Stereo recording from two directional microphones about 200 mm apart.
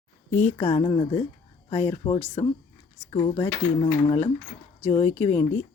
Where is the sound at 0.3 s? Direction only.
35° left (ahead or behind).